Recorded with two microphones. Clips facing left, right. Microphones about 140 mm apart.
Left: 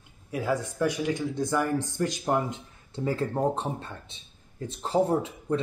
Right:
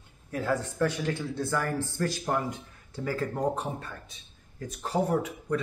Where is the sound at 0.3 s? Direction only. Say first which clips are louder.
Left 1 dB; 10° left (ahead or behind).